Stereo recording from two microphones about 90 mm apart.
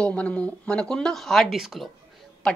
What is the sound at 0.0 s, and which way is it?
Speech, 15° left (ahead or behind).